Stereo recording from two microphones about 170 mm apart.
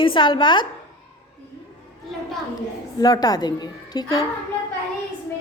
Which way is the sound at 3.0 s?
20° left (ahead or behind).